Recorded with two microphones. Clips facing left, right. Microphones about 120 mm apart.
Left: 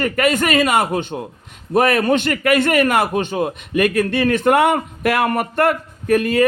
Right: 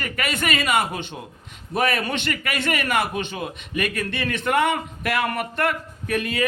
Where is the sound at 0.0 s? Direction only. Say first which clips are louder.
Left 9 dB; 45° left (ahead or behind).